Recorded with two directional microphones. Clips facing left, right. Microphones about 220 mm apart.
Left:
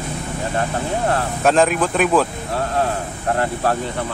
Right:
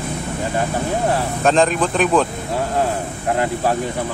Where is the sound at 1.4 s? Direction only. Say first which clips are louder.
Even; 5° left (ahead or behind).